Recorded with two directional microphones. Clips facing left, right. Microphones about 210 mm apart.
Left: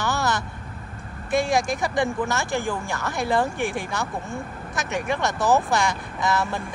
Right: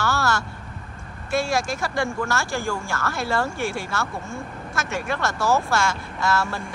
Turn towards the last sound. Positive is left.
turn(degrees=15)  # may be behind; listen again after turning